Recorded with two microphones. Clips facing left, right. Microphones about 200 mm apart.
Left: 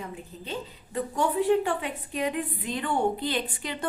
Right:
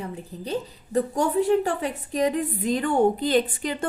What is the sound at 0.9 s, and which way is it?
A woman's voice, 45° right (ahead or behind).